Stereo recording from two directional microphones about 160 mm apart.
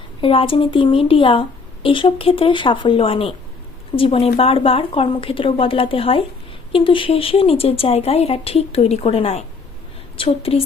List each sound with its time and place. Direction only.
0.2 s a woman's voice: 35° left (ahead or behind)